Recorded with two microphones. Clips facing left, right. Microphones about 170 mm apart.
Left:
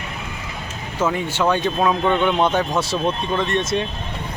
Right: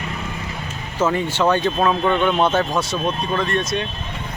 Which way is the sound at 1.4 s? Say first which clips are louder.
Right 1 dB; 10° left (ahead or behind).